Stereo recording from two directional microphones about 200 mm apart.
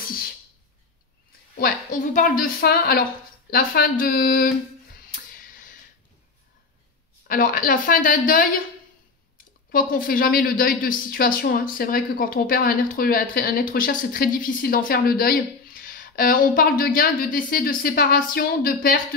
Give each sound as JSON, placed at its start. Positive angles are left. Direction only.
{"t": 1.6, "sound": "speech", "side_deg": 40}
{"t": 7.2, "sound": "speech", "side_deg": 45}
{"t": 9.7, "sound": "speech", "side_deg": 45}